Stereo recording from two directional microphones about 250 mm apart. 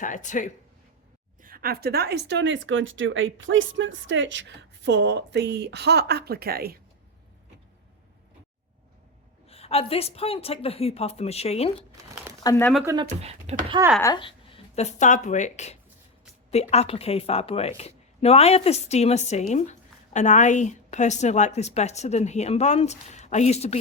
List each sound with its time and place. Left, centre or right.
0.0 s speech: left
1.4 s speech: right
9.5 s a woman's voice: left
11.9 s crumpling: centre
12.4 s speech: centre
12.7 s speech: centre
13.1 s speech: right
14.0 s a woman's voice: centre